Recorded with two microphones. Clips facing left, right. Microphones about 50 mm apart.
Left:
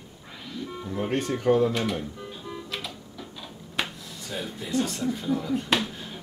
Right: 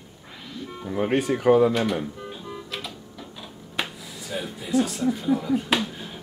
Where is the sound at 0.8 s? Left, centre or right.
Centre.